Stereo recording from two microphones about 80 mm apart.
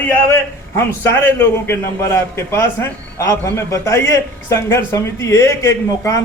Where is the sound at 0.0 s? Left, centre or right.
Left.